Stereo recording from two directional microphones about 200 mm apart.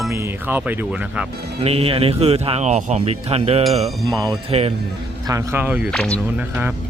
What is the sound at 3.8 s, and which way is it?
Speech, centre (ahead or behind).